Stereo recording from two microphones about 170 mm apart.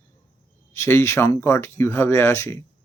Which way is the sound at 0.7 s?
15° left (ahead or behind).